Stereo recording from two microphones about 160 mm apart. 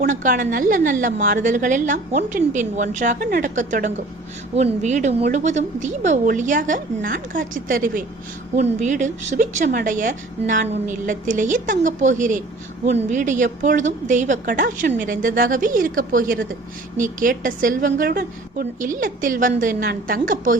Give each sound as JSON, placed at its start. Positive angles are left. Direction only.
{"t": 0.1, "sound": "a woman's voice", "side_deg": -55}